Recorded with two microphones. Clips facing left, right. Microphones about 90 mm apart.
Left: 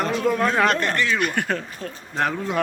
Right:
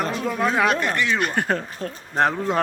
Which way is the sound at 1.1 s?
30° right (ahead or behind).